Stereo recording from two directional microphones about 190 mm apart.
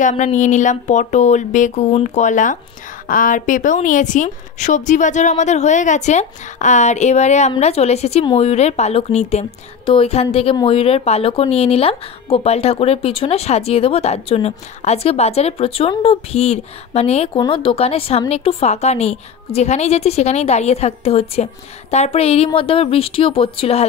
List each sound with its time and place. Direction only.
0.0 s a woman's voice: 40° left (ahead or behind)